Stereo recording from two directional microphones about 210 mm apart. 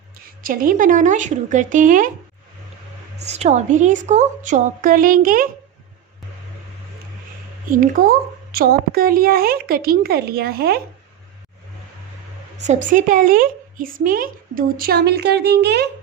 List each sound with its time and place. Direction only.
0.4 s a woman's voice: 40° right (ahead or behind)
3.2 s a woman's voice: 30° right (ahead or behind)
7.7 s a woman's voice: 40° right (ahead or behind)
12.9 s a woman's voice: 40° right (ahead or behind)